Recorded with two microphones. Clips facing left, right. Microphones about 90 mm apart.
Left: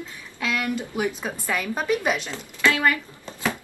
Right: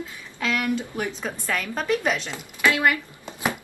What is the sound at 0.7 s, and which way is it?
Speech, 10° left (ahead or behind).